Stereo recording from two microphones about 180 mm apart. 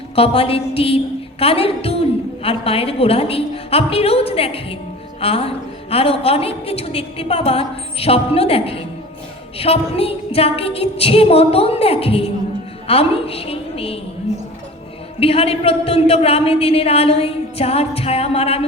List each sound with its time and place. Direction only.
0.2 s a woman's voice: 30° left (ahead or behind)
15.2 s a woman's voice: 30° left (ahead or behind)